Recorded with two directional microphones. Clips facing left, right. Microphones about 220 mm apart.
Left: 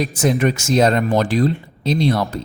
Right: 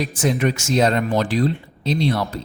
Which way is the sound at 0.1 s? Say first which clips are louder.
Left 3 dB; 45° left (ahead or behind).